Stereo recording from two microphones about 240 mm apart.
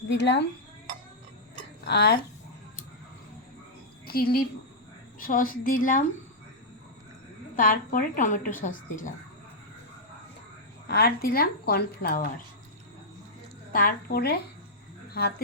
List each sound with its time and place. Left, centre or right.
0.1 s speech: left
1.8 s speech: left
4.0 s a woman's voice: left
7.5 s a woman's voice: left
10.8 s a woman's voice: left
13.7 s a woman's voice: left